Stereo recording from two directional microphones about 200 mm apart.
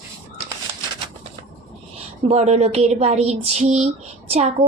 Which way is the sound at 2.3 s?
35° right (ahead or behind).